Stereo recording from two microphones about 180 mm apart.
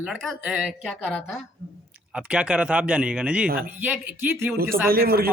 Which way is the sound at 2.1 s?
5° right (ahead or behind).